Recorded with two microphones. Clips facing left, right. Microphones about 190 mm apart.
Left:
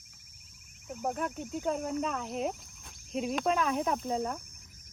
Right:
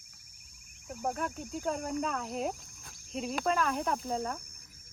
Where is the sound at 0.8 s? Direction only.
5° left (ahead or behind).